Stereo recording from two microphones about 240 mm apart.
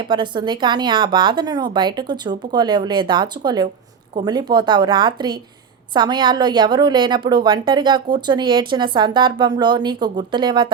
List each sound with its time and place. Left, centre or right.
0.1 s a woman's voice: centre